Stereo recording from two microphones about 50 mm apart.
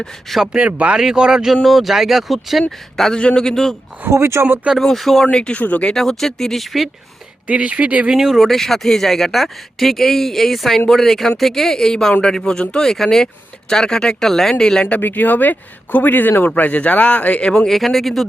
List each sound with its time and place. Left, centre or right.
0.0 s speech: centre
0.5 s speech: right
1.6 s speech: centre
3.2 s speech: centre
4.1 s speech: right
4.8 s speech: centre
5.3 s speech: centre
5.9 s speech: centre
7.4 s speech: right
8.1 s speech: centre
8.4 s speech: centre
14.8 s speech: left; by 17.7 s centre
17.7 s speech: centre